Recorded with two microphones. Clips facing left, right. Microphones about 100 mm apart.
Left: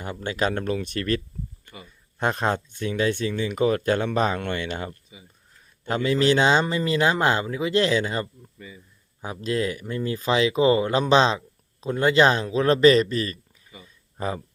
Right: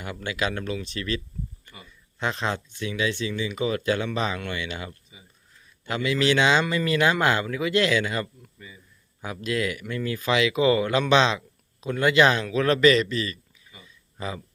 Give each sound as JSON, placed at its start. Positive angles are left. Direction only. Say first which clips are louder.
{"t": 0.0, "sound": "speech", "louder": "left 3 dB", "side_deg": 35}
{"t": 5.9, "sound": "speech", "louder": "left 3 dB", "side_deg": 40}